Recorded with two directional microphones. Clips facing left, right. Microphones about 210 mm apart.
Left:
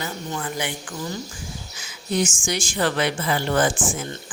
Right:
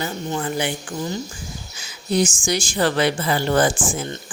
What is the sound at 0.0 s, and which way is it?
A woman's voice, 30° right (ahead or behind).